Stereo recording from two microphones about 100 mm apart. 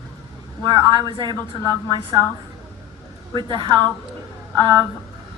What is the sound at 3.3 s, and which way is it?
A woman's voice, 50° right (ahead or behind).